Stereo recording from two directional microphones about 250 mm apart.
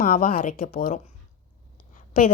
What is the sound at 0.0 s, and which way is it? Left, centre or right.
Speech, left.